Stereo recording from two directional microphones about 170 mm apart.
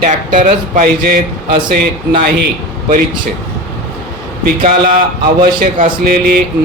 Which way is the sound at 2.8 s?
50° right (ahead or behind).